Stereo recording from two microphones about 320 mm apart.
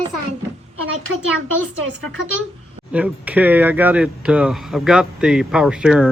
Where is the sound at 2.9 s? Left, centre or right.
Centre.